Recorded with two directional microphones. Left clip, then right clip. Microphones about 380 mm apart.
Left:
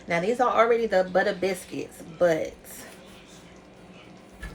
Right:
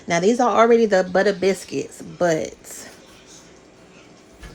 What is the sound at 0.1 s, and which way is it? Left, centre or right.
Speech, centre.